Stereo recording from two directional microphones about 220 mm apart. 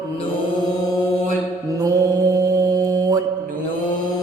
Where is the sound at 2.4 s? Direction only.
15° right (ahead or behind).